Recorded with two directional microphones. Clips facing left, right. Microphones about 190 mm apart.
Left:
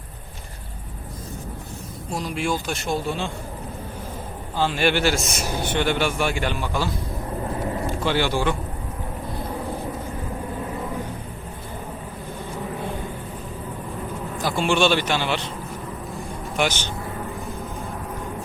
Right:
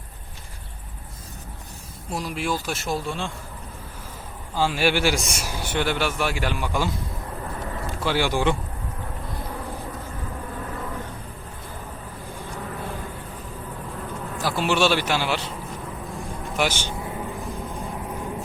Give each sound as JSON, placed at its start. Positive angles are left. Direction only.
{"t": 2.0, "sound": "a man's voice", "side_deg": -5}
{"t": 4.5, "sound": "a man's voice", "side_deg": -10}
{"t": 7.5, "sound": "vehicle", "side_deg": 25}
{"t": 7.9, "sound": "speech", "side_deg": -5}
{"t": 14.3, "sound": "a man's voice", "side_deg": -5}